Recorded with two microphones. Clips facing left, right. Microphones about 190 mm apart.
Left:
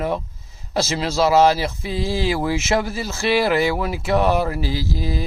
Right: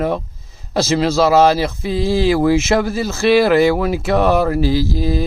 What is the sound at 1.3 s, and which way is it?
Speech, 40° right (ahead or behind).